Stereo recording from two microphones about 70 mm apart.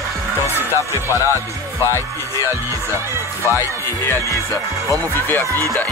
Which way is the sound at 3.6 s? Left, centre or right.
Left.